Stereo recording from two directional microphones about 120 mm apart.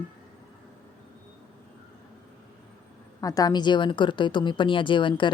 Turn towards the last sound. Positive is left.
turn(degrees=40)  # may be behind; listen again after turning